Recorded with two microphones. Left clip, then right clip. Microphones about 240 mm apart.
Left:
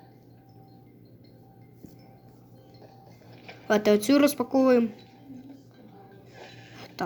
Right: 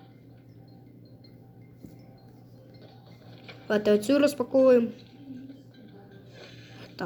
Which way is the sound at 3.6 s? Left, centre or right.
Centre.